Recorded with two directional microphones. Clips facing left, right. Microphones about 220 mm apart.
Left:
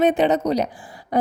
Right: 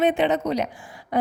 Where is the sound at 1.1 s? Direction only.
40° left (ahead or behind).